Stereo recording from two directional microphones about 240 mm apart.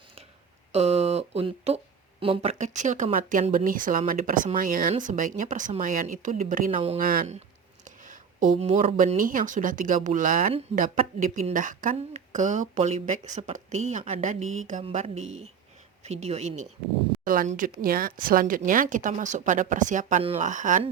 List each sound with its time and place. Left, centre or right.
0.7 s speech: right